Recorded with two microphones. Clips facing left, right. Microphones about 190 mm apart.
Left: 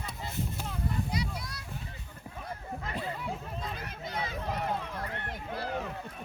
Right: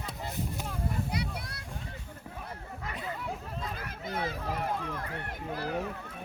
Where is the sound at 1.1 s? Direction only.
60° right (ahead or behind).